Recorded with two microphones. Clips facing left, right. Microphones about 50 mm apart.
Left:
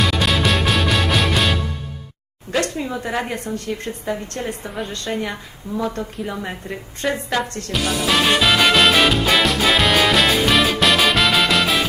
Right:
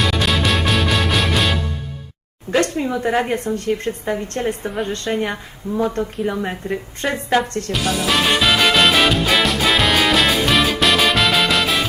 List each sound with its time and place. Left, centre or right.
0.0 s music: centre
2.6 s a woman's voice: right
3.1 s a woman's voice: centre
3.3 s a woman's voice: right
7.7 s music: centre